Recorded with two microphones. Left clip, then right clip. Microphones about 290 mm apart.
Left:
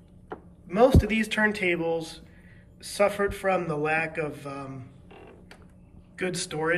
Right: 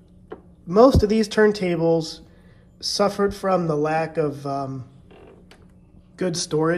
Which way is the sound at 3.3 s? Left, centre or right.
Centre.